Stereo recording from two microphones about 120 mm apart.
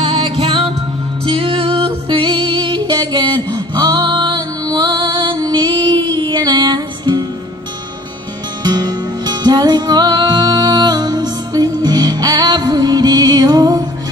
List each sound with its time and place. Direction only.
0.0 s music: 50° right (ahead or behind)
8.6 s music: 35° right (ahead or behind)